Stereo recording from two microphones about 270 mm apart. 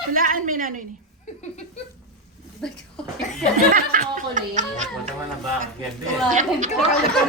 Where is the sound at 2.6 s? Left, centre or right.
Centre.